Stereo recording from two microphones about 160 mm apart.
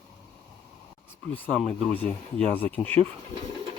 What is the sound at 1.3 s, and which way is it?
Speech, 5° left (ahead or behind).